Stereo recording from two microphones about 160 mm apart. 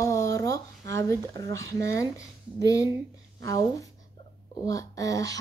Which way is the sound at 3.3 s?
20° left (ahead or behind).